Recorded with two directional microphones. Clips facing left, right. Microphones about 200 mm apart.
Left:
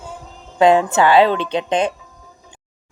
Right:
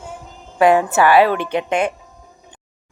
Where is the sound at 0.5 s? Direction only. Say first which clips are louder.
Left 1 dB; 20° left (ahead or behind).